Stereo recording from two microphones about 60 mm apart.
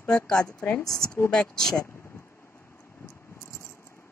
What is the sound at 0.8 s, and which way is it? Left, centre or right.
Speech, left.